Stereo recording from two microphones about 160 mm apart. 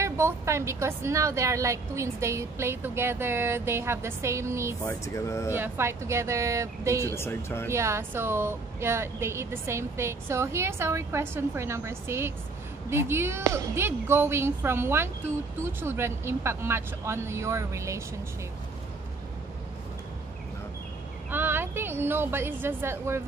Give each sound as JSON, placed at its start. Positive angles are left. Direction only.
{"t": 0.0, "sound": "a woman's voice", "side_deg": -15}
{"t": 4.8, "sound": "speech", "side_deg": 20}
{"t": 5.5, "sound": "a woman's voice", "side_deg": -15}
{"t": 7.2, "sound": "speech", "side_deg": 15}
{"t": 7.7, "sound": "a woman's voice", "side_deg": -15}
{"t": 21.3, "sound": "a woman's voice", "side_deg": -15}